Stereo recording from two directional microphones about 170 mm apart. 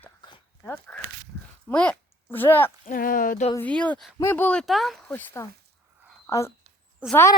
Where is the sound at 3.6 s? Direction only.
10° left (ahead or behind).